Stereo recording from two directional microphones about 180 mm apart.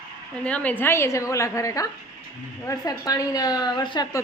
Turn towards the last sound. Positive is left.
turn(degrees=25)  # may be behind; listen again after turning